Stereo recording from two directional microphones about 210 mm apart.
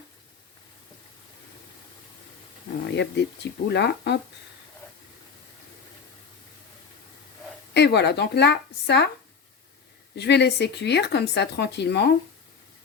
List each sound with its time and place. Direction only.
2.9 s speech: 55° left (ahead or behind)
7.7 s speech: 55° left (ahead or behind)
10.2 s speech: 55° left (ahead or behind)